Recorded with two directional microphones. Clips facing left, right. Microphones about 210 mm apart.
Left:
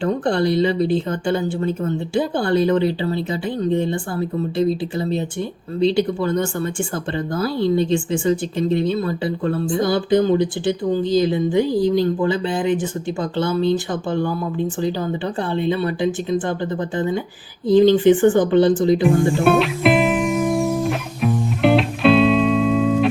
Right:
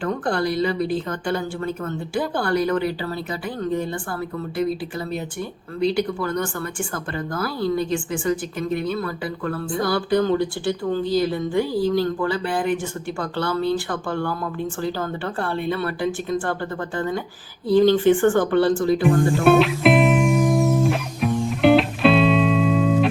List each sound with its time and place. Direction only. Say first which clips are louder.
0.0 s speech: left 4 dB; 25° left (ahead or behind)
17.7 s speech: left 3 dB; 20° left (ahead or behind)
19.0 s music: left 1 dB; centre (ahead or behind)